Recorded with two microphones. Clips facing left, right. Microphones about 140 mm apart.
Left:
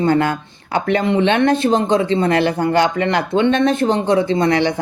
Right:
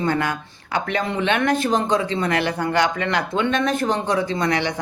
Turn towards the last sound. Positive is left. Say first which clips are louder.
# left 6 dB
turn(degrees=30)  # may be behind; listen again after turning